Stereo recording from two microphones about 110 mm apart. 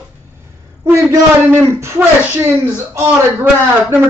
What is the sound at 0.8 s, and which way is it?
Speech, 25° right (ahead or behind).